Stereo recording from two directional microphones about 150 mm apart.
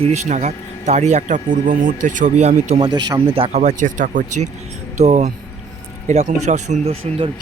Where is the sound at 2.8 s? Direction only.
30° right (ahead or behind).